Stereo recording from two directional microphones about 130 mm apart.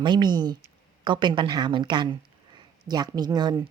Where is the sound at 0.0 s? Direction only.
35° right (ahead or behind).